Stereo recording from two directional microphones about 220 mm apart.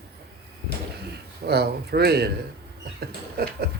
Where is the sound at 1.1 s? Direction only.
45° right (ahead or behind).